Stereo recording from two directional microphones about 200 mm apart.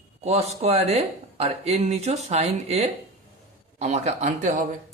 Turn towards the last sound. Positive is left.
turn(degrees=-40)  # may be behind; listen again after turning